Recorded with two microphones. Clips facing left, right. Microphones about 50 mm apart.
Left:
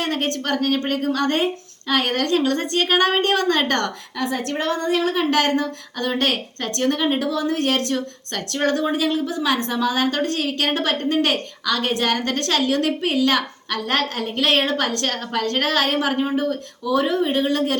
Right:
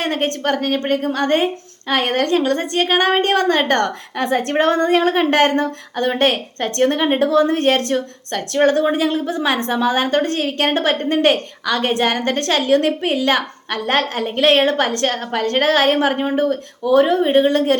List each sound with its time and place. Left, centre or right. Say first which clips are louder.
0.0 s a woman's voice: right 4 dB; right
4.2 s a woman's voice: right 7 dB; right